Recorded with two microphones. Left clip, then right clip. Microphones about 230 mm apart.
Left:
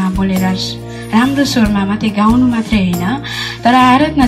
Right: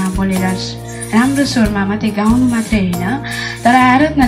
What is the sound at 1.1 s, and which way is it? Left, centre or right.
Speech, left.